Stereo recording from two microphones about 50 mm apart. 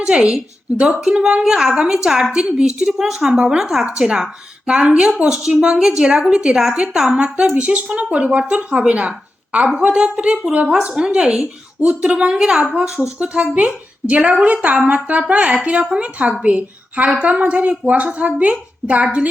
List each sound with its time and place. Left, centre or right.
0.0 s a woman's voice: centre
1.7 s speech: right
2.0 s speech: centre
2.3 s speech: centre